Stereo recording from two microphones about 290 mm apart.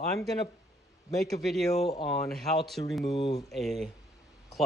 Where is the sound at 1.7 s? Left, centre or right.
Centre.